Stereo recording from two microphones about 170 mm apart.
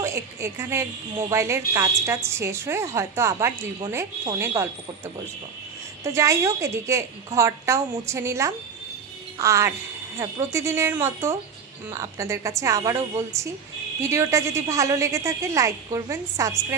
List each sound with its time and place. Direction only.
0.0 s a woman's voice: 15° right (ahead or behind)
6.0 s a woman's voice: 15° right (ahead or behind)